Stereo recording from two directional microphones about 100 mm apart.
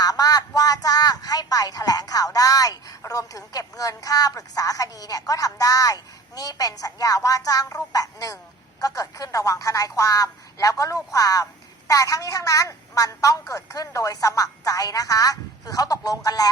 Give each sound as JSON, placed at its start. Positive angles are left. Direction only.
{"t": 0.0, "sound": "speech", "side_deg": 40}